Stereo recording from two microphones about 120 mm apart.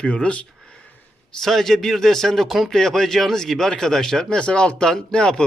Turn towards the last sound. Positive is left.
turn(degrees=5)  # may be behind; listen again after turning